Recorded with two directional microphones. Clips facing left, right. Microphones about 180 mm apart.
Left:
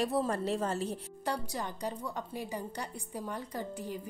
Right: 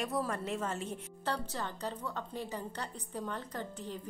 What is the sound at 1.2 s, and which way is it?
A woman's voice, 10° left (ahead or behind).